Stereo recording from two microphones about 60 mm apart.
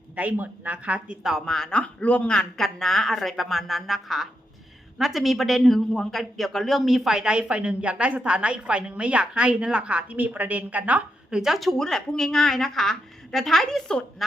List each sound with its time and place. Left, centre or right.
0.2 s a woman's voice: right
1.5 s a woman's voice: centre
1.8 s a man's voice: left; by 11.0 s right
11.3 s a woman's voice: centre
14.2 s a man's voice: centre